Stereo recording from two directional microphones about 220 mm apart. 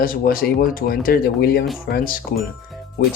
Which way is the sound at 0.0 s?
40° left (ahead or behind).